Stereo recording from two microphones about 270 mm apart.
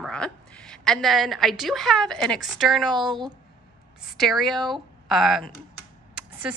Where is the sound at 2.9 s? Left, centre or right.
Centre.